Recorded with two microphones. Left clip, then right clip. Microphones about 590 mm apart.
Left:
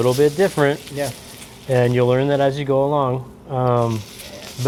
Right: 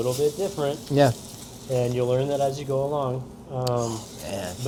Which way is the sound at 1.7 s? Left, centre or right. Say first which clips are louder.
Left 7 dB; left.